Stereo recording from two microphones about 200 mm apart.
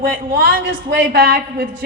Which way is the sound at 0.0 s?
50° right (ahead or behind).